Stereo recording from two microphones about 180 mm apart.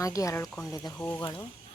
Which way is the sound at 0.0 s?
20° left (ahead or behind).